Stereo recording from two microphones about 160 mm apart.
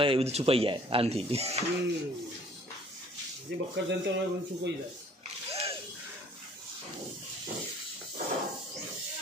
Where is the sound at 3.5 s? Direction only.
90° right.